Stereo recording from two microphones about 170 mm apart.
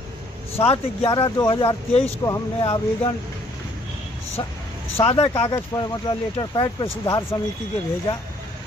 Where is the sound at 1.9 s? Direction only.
35° left (ahead or behind).